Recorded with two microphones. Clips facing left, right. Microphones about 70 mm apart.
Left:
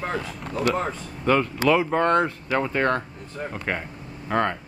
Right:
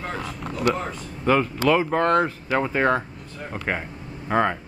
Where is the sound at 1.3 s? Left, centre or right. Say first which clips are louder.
Even; centre.